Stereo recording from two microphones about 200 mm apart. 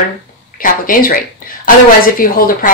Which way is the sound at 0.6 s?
45° left (ahead or behind).